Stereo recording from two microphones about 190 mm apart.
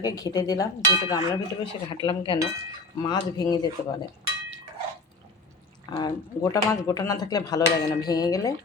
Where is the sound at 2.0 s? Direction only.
25° left (ahead or behind).